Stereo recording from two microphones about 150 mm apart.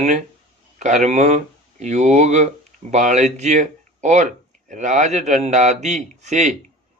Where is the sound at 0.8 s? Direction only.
50° right (ahead or behind).